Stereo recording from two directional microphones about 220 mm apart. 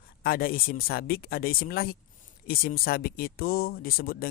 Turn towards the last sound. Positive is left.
turn(degrees=45)  # may be behind; listen again after turning